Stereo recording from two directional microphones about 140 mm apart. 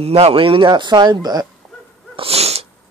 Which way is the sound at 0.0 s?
45° right (ahead or behind).